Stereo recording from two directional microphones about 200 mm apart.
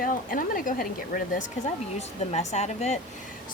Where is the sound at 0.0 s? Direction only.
45° left (ahead or behind).